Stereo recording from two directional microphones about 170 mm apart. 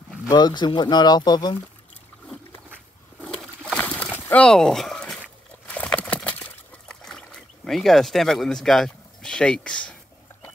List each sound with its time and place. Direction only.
0.3 s speech: 25° left (ahead or behind)
3.2 s pigeon: 5° left (ahead or behind)
4.3 s speech: 5° left (ahead or behind)
5.7 s a sound: 10° left (ahead or behind)